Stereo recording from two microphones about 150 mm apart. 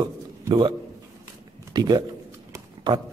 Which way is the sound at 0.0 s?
30° right (ahead or behind).